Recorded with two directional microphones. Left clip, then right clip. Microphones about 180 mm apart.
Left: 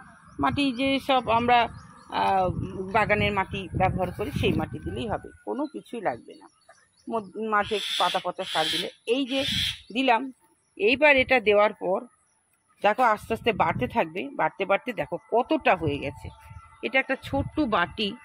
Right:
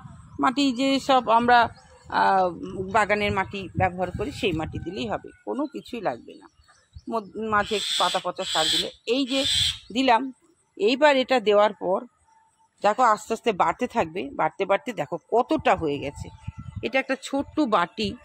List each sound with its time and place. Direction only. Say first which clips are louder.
0.4 s a man's voice: right 2 dB; 15° right (ahead or behind)